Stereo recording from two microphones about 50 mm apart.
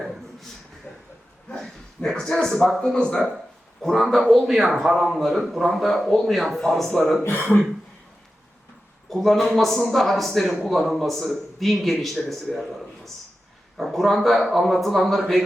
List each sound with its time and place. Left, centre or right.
0.9 s a sound: left
2.0 s a man's voice: centre
2.8 s speech: centre
3.3 s a man's voice: centre
9.0 s a man's voice: centre
13.7 s a man's voice: centre